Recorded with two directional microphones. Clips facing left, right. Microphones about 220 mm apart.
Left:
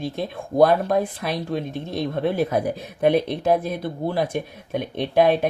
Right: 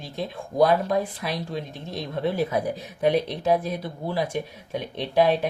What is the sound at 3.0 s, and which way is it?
Speech, 55° left (ahead or behind).